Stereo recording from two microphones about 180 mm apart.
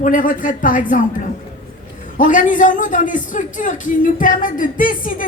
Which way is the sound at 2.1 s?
45° left (ahead or behind).